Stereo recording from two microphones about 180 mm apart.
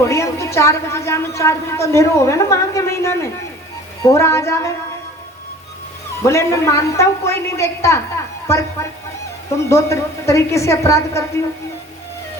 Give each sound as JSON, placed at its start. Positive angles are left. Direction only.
{"t": 0.1, "sound": "a woman's voice", "side_deg": 15}
{"t": 6.2, "sound": "a woman's voice", "side_deg": 15}